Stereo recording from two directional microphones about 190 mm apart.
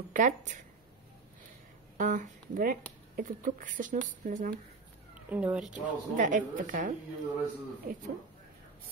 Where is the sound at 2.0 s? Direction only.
45° right (ahead or behind).